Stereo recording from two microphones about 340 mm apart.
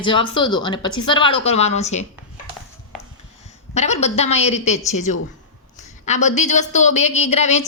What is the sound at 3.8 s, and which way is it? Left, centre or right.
Speech, centre.